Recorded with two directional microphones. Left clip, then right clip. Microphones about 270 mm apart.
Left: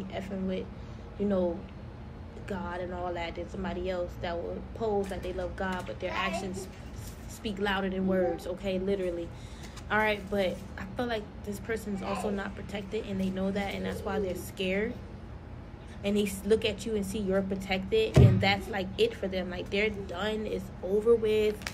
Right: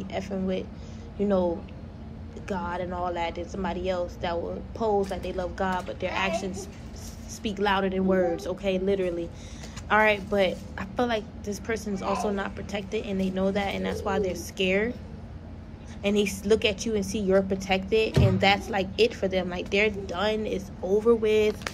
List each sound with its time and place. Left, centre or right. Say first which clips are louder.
0.1 s a woman's voice: right 6 dB; centre
2.4 s a woman's voice: right 5 dB; centre
16.0 s a woman's voice: right 5 dB; centre